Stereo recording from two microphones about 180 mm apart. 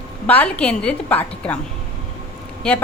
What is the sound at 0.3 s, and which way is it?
A woman's voice, 5° left (ahead or behind).